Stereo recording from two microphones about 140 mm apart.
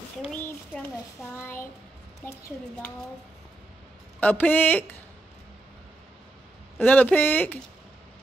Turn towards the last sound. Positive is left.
turn(degrees=15)  # may be behind; listen again after turning